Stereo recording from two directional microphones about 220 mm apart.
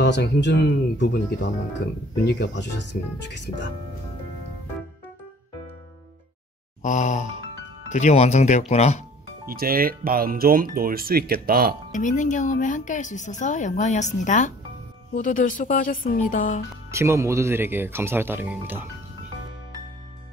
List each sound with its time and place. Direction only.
0.0 s speech: 50° left (ahead or behind)
6.8 s speech: 35° left (ahead or behind)
9.5 s speech: 40° right (ahead or behind)
11.9 s speech: 35° left (ahead or behind)
16.9 s speech: 10° right (ahead or behind)